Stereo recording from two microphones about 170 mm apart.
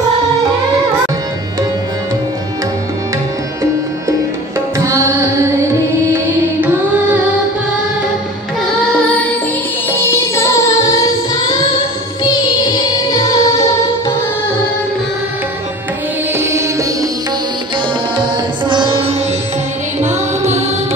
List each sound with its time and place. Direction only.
4.6 s music: 15° right (ahead or behind)
9.9 s music: 15° left (ahead or behind)
13.1 s music: 20° left (ahead or behind)
16.3 s music: 15° right (ahead or behind)
18.7 s music: 30° right (ahead or behind)